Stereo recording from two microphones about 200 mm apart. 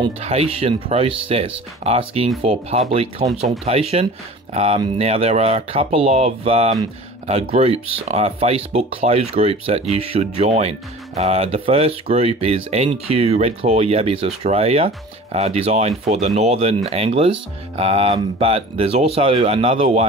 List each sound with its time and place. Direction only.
0.0 s speech: 30° right (ahead or behind)